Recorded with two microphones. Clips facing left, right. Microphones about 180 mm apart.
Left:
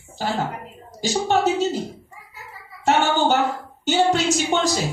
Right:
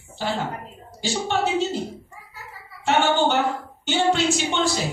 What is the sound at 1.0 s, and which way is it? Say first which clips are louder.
Speech: left 4 dB; 40° left (ahead or behind).